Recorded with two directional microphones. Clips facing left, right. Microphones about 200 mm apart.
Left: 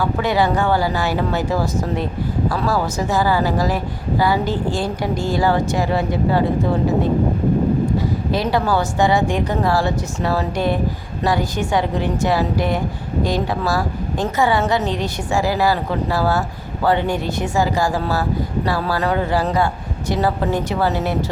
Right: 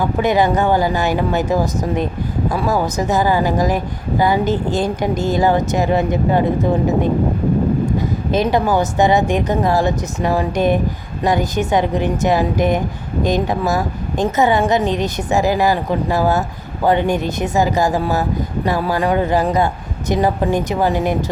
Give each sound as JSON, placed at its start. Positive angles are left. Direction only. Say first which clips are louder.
{"t": 0.0, "sound": "a woman's voice", "louder": "right 3 dB", "side_deg": -20}
{"t": 7.9, "sound": "a woman's voice", "louder": "right 2 dB", "side_deg": -20}